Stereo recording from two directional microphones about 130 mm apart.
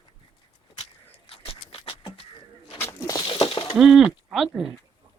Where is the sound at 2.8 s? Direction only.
25° left (ahead or behind).